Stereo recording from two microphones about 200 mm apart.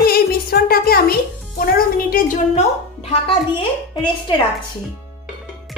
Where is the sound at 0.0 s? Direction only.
50° left (ahead or behind); by 3.3 s 30° left (ahead or behind).